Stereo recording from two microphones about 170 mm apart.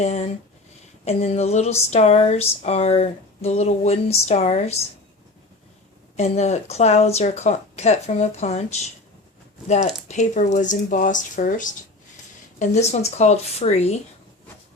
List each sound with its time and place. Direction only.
0.0 s speech: 40° left (ahead or behind)
6.1 s speech: 40° left (ahead or behind)